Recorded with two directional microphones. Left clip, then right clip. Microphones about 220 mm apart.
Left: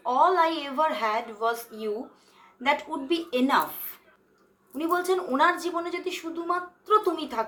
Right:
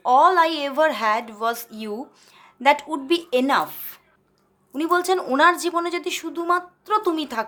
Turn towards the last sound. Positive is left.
turn(degrees=-50)  # may be behind; listen again after turning